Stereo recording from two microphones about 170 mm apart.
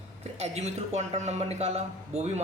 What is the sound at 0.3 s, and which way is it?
Speech, 40° right (ahead or behind).